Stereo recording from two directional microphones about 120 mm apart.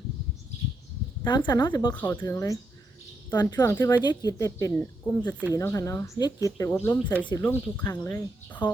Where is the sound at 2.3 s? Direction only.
25° left (ahead or behind).